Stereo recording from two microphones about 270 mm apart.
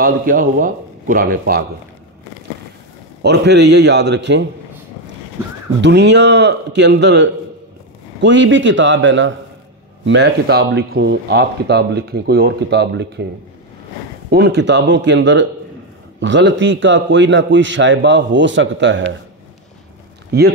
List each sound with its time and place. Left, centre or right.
0.0 s speech: right
3.2 s speech: right
5.8 s a man's voice: right
14.3 s a man's voice: right